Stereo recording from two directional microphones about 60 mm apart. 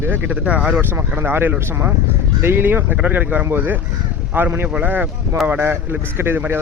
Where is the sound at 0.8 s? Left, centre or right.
Right.